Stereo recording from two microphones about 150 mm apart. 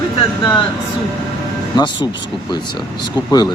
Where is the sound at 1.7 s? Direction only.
30° left (ahead or behind).